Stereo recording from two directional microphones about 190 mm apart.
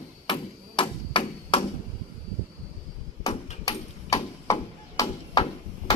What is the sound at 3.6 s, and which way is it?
Ping, 15° left (ahead or behind).